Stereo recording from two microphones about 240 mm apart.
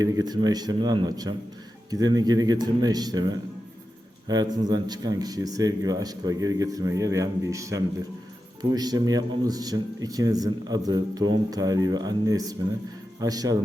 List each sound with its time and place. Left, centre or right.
0.0 s a man's voice: centre